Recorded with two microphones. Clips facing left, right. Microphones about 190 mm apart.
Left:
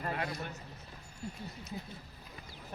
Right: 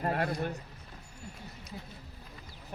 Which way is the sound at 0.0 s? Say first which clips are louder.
Right 6 dB; 50° right (ahead or behind).